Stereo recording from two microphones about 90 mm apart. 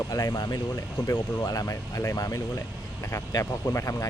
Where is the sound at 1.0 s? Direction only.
40° left (ahead or behind).